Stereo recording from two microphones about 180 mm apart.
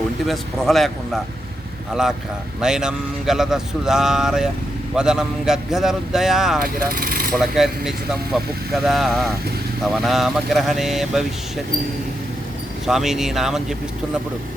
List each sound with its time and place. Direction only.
0.3 s speech: centre (ahead or behind)
2.6 s speech: 5° right (ahead or behind)
6.6 s speech: 55° right (ahead or behind)
7.3 s speech: centre (ahead or behind)
12.8 s speech: centre (ahead or behind)